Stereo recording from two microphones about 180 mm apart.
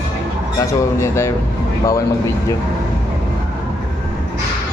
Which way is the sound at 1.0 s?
15° left (ahead or behind).